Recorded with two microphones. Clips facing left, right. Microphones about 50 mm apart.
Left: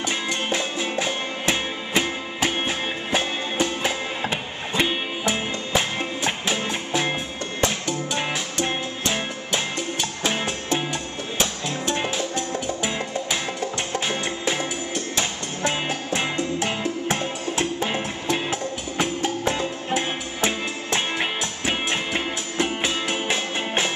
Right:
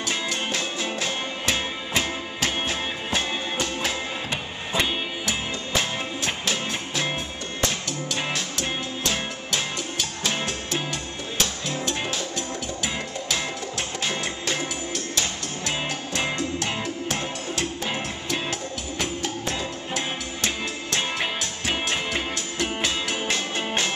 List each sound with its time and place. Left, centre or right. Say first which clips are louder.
0.3 s music: left 3 dB; centre